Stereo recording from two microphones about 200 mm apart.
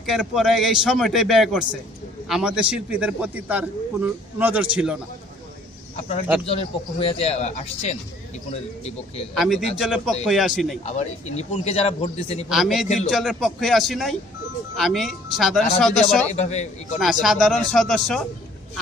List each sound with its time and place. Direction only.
0.0 s a man's voice: centre (ahead or behind)
6.0 s a man's voice: 35° left (ahead or behind)
9.3 s a man's voice: centre (ahead or behind)
10.8 s a man's voice: 35° left (ahead or behind)
12.5 s a man's voice: centre (ahead or behind)
16.3 s a man's voice: 35° left (ahead or behind)
17.0 s a man's voice: centre (ahead or behind)